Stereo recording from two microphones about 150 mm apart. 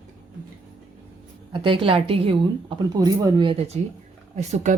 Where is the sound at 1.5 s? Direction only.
35° right (ahead or behind).